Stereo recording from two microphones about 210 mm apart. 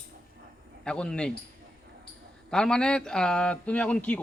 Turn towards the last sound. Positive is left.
turn(degrees=5)  # may be behind; listen again after turning